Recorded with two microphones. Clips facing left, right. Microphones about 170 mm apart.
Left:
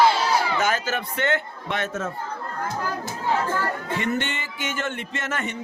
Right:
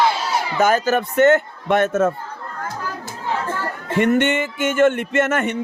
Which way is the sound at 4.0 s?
60° right (ahead or behind).